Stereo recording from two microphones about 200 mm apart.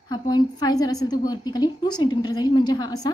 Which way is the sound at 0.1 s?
20° left (ahead or behind).